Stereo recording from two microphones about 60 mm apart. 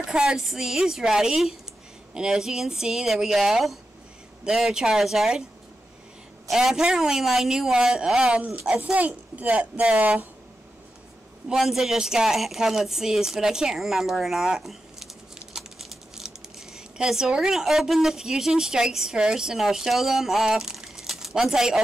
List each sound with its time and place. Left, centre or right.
0.1 s a woman's voice: centre
6.5 s a woman's voice: centre
11.4 s a woman's voice: centre